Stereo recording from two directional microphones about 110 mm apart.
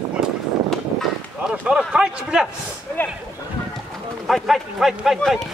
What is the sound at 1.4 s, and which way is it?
Speech, 10° right (ahead or behind).